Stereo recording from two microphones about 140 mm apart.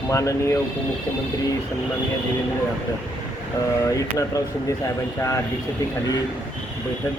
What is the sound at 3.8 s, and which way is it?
Speech, 25° left (ahead or behind).